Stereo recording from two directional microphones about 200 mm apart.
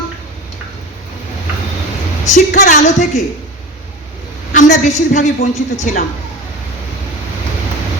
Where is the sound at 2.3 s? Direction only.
40° left (ahead or behind).